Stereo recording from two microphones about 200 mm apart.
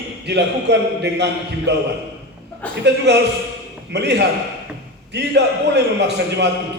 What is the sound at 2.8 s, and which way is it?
A man's voice, 60° right (ahead or behind).